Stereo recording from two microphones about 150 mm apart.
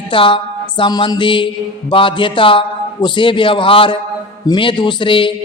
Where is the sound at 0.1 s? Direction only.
35° left (ahead or behind).